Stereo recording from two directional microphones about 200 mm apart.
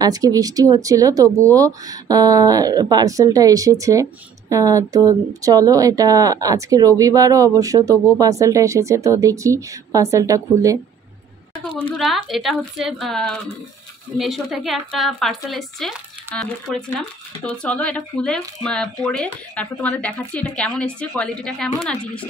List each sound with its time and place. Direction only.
0.0 s speech: 20° right (ahead or behind)
11.5 s speech: 25° left (ahead or behind)
12.0 s speech: centre (ahead or behind)